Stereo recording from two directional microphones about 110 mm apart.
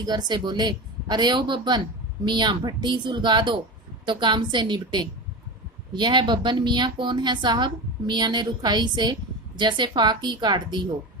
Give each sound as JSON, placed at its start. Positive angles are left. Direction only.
{"t": 0.0, "sound": "a woman's voice", "side_deg": -40}